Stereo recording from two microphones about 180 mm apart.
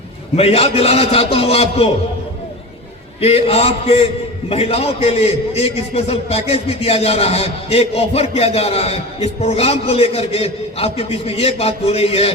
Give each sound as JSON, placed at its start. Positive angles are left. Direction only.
{"t": 0.3, "sound": "a man's voice", "side_deg": 35}
{"t": 3.2, "sound": "a man's voice", "side_deg": 35}